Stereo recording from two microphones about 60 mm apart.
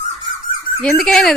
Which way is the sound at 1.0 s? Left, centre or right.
Centre.